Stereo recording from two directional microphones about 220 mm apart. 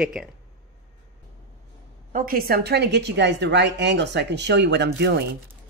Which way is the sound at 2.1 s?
40° right (ahead or behind).